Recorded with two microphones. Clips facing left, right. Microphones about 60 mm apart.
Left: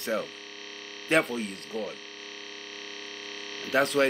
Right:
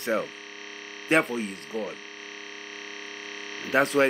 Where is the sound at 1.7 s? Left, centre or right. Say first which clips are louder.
Right 2 dB; centre.